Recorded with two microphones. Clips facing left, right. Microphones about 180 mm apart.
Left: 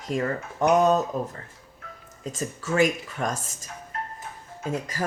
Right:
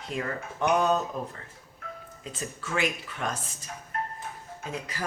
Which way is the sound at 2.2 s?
45° left (ahead or behind).